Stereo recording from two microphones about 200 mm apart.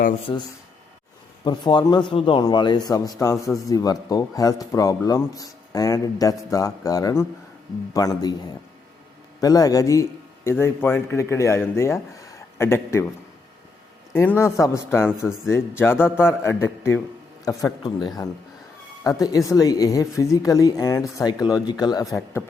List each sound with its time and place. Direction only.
0.3 s a man's voice: 20° left (ahead or behind)
1.5 s a man's voice: 20° left (ahead or behind)
9.4 s speech: 20° left (ahead or behind)
14.1 s speech: 10° left (ahead or behind)